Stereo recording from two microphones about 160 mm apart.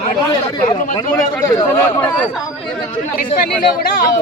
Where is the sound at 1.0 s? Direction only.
20° left (ahead or behind).